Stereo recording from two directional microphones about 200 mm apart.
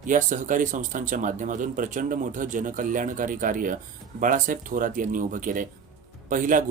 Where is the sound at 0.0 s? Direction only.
40° right (ahead or behind).